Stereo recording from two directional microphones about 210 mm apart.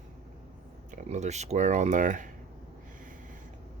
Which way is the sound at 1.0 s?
30° right (ahead or behind).